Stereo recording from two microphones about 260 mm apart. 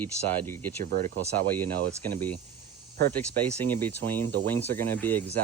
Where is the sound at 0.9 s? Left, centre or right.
Right.